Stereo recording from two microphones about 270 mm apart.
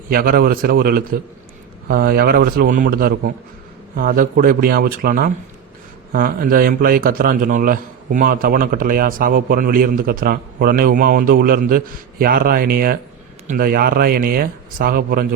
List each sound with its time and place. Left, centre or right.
0.1 s a man's voice: right